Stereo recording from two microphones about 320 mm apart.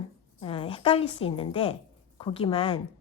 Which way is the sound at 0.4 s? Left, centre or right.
Centre.